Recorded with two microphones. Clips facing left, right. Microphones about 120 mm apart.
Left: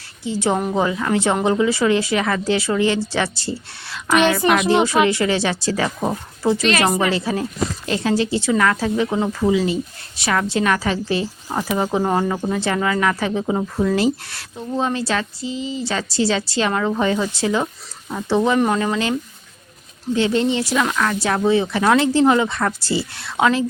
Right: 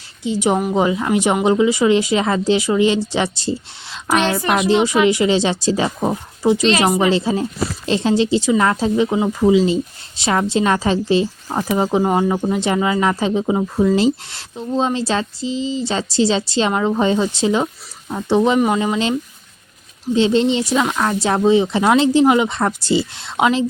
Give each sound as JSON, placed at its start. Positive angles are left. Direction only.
{"t": 0.3, "sound": "speech", "side_deg": -15}
{"t": 20.1, "sound": "speech", "side_deg": -20}